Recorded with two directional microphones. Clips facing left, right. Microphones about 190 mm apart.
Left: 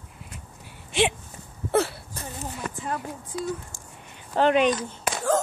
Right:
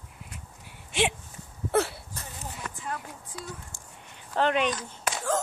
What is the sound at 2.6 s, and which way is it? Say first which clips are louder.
Speech: left 5 dB; 35° left (ahead or behind).